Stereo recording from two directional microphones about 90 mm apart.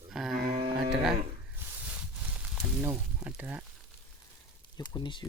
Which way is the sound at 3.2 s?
15° right (ahead or behind).